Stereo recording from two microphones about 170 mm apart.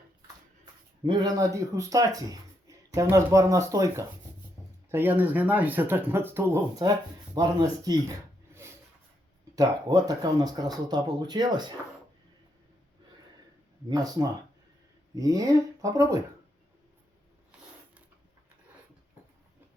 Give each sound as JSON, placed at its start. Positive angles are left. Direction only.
{"t": 0.6, "sound": "speech", "side_deg": -25}
{"t": 9.6, "sound": "speech", "side_deg": -20}
{"t": 13.9, "sound": "speech", "side_deg": -20}